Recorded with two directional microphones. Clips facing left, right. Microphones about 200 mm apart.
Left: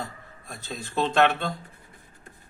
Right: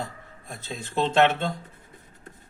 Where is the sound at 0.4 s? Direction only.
20° right (ahead or behind).